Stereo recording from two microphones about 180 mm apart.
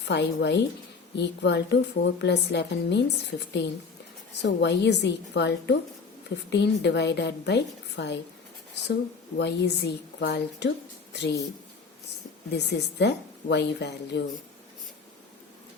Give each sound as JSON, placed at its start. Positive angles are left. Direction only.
{"t": 0.0, "sound": "a woman's voice", "side_deg": 70}
{"t": 9.4, "sound": "a woman's voice", "side_deg": 70}
{"t": 12.5, "sound": "a woman's voice", "side_deg": 70}